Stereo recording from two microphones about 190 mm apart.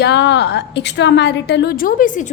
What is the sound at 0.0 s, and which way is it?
A woman's voice, 65° left (ahead or behind).